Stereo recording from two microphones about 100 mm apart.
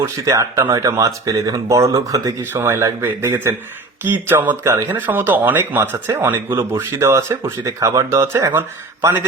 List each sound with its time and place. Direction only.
0.0 s speech: 30° right (ahead or behind)
2.4 s speech: 25° right (ahead or behind)